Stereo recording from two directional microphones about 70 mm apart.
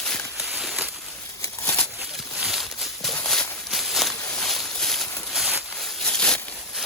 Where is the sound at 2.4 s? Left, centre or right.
Centre.